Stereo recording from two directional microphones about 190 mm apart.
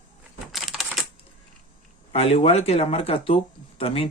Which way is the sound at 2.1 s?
30° left (ahead or behind).